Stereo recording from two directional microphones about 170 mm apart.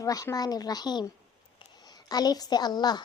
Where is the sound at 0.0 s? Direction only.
20° left (ahead or behind).